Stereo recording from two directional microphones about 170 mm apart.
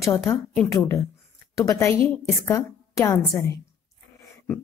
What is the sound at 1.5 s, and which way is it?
A woman's voice, 15° left (ahead or behind).